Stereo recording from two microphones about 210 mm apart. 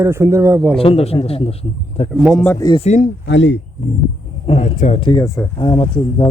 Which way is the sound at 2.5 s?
20° left (ahead or behind).